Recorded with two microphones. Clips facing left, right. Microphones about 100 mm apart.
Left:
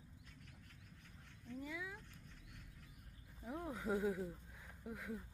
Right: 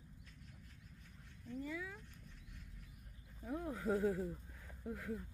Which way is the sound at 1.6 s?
10° left (ahead or behind).